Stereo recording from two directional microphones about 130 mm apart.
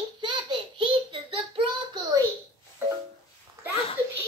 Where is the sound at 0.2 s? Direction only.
35° right (ahead or behind).